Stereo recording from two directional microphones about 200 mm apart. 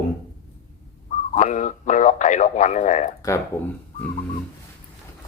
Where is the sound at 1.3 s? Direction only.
40° left (ahead or behind).